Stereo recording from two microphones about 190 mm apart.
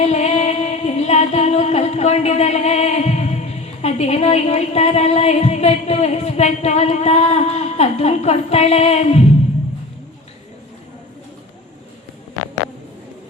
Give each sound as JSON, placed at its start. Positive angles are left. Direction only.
{"t": 0.0, "sound": "music", "side_deg": 35}